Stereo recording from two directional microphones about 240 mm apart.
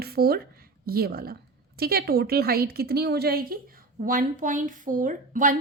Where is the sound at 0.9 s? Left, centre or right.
Right.